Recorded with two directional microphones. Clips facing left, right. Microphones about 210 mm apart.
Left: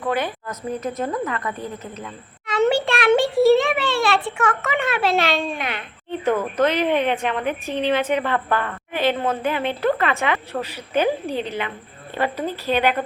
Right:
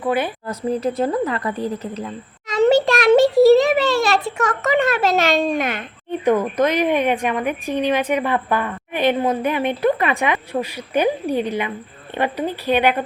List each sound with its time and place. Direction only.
0.0 s a woman's voice: 10° right (ahead or behind)
0.4 s speech: 30° right (ahead or behind)
6.1 s a woman's voice: 15° right (ahead or behind)